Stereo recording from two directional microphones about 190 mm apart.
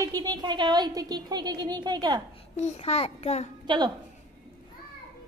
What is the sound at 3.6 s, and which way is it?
Speech, 20° right (ahead or behind).